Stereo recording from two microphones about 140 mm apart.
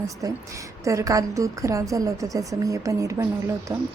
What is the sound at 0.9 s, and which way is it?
A woman's voice, 25° right (ahead or behind).